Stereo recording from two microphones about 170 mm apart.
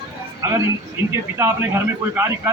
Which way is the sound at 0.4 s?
20° right (ahead or behind).